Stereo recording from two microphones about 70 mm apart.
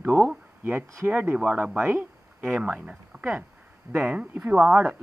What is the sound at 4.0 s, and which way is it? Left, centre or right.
Speech, centre.